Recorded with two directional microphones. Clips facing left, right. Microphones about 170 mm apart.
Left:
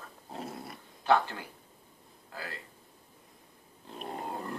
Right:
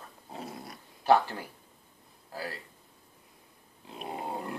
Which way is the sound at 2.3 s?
35° right (ahead or behind).